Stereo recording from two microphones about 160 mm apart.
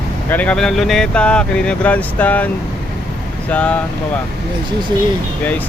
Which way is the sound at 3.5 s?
10° left (ahead or behind).